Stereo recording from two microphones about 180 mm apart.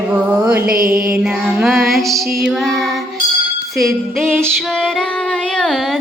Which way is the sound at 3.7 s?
Centre (ahead or behind).